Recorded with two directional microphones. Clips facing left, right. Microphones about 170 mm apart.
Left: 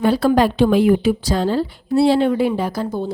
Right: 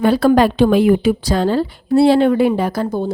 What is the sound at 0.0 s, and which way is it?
A woman's voice, 65° right (ahead or behind).